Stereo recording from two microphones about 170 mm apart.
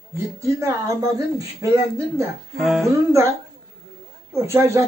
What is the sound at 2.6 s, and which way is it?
Speech, centre (ahead or behind).